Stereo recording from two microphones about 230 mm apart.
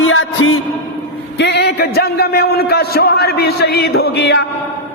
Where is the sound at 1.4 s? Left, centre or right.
Left.